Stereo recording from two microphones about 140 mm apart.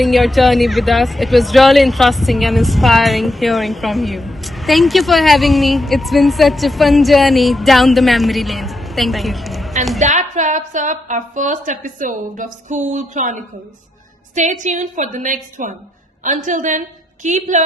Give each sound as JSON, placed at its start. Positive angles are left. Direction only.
{"t": 0.0, "sound": "speech", "side_deg": 0}
{"t": 10.0, "sound": "a woman's voice", "side_deg": -60}